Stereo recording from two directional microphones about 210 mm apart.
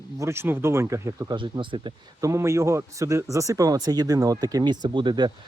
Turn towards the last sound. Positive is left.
turn(degrees=-20)  # may be behind; listen again after turning